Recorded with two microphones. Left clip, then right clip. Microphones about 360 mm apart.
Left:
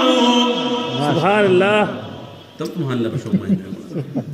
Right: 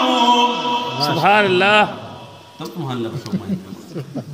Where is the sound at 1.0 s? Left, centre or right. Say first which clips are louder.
Right 1 dB; right.